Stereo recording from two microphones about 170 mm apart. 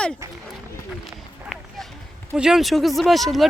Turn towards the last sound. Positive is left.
turn(degrees=0)  # may be behind; listen again after turning